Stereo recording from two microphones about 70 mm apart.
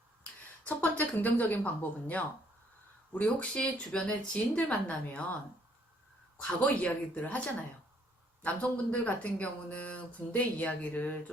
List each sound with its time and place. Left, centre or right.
0.8 s speech: left
6.7 s speech: centre